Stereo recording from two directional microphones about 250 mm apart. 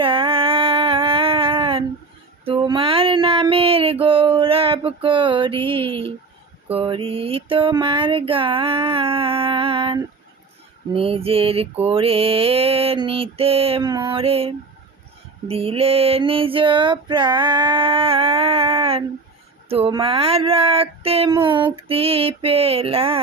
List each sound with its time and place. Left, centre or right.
0.0 s a sound: right
4.0 s music: right
6.7 s female singing: right